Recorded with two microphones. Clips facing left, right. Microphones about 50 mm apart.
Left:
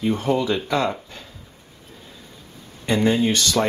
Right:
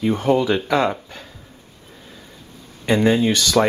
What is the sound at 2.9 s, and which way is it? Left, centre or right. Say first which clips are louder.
Speech: right 2 dB; right.